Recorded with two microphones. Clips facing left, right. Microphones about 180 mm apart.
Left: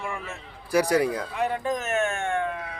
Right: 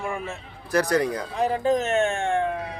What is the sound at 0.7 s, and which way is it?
Speech, 10° left (ahead or behind).